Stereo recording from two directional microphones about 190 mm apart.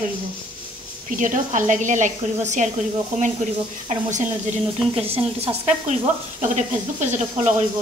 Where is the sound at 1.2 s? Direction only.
40° right (ahead or behind).